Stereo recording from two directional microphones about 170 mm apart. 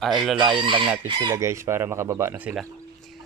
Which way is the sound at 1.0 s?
25° right (ahead or behind).